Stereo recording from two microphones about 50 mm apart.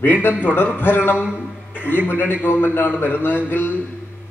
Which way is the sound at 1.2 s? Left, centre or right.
Right.